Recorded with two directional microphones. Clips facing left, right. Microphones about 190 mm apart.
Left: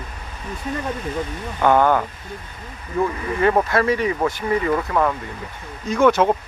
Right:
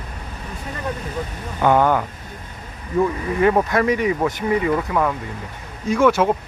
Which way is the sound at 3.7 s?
15° right (ahead or behind).